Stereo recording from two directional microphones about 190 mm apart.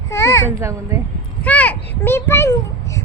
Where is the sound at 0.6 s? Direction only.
15° right (ahead or behind).